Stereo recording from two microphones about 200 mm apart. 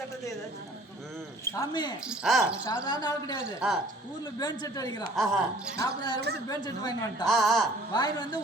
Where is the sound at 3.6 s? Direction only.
5° right (ahead or behind).